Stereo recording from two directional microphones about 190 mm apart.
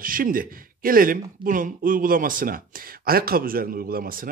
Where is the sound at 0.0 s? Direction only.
45° right (ahead or behind).